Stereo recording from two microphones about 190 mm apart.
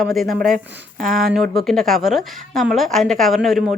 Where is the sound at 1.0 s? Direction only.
45° right (ahead or behind).